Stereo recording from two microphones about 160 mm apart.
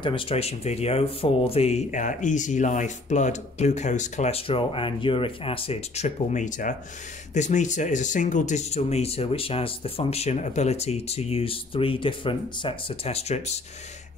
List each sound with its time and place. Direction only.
0.0 s speech: 35° left (ahead or behind)